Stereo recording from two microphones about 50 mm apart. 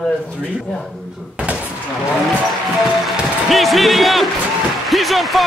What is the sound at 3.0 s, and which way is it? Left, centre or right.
Music, centre.